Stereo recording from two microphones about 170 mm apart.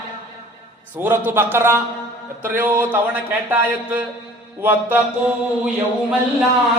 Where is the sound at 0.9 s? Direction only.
10° right (ahead or behind).